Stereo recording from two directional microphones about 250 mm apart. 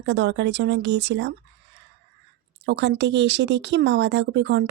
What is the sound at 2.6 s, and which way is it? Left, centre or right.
Speech, right.